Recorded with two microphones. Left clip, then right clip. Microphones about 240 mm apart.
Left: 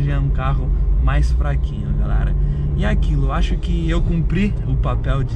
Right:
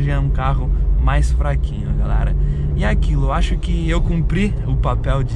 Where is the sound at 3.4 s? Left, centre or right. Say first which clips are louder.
Right 1 dB; right.